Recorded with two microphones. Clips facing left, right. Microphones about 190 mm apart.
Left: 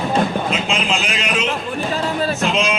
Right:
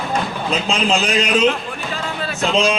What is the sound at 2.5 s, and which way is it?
Speech, 35° right (ahead or behind).